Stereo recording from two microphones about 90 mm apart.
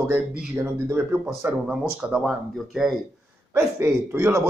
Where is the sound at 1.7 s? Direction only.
10° right (ahead or behind).